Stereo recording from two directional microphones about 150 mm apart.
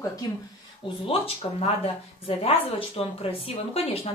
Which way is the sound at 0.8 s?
40° left (ahead or behind).